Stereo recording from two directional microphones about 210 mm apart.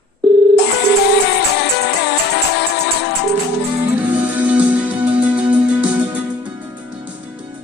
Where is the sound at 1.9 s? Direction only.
50° left (ahead or behind).